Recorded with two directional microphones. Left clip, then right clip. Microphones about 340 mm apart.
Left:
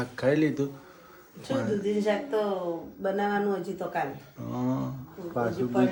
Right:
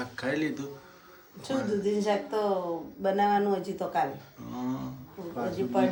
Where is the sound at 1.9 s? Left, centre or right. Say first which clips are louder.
Left 1 dB; centre.